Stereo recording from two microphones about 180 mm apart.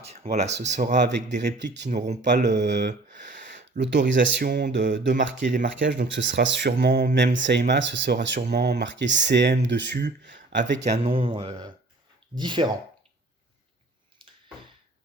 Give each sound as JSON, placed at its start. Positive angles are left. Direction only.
{"t": 0.0, "sound": "speech", "side_deg": -35}
{"t": 0.9, "sound": "speech", "side_deg": -70}
{"t": 10.8, "sound": "speech", "side_deg": -35}